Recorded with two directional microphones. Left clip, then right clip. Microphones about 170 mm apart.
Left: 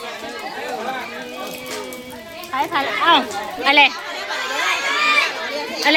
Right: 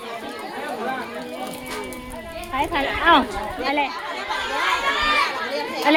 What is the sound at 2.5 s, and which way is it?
Speech, 25° right (ahead or behind).